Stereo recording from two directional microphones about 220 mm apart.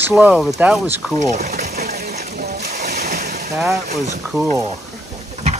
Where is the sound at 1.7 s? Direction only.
45° right (ahead or behind).